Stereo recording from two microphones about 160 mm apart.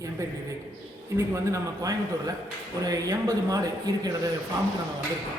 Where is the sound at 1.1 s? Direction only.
15° right (ahead or behind).